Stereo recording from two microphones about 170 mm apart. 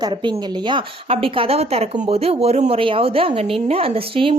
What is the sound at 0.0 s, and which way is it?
Speech, 30° right (ahead or behind).